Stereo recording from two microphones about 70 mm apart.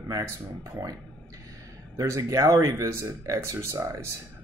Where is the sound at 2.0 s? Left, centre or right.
Right.